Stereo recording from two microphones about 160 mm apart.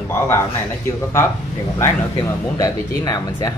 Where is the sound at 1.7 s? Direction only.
20° left (ahead or behind).